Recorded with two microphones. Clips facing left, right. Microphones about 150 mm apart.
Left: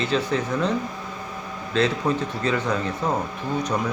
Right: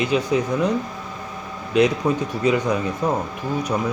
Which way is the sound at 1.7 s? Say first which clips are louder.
Right 4 dB; 15° right (ahead or behind).